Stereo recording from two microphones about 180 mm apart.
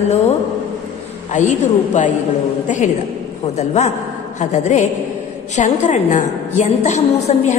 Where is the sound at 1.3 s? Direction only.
40° left (ahead or behind).